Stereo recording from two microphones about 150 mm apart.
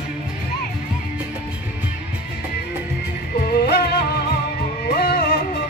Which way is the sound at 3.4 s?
90° left.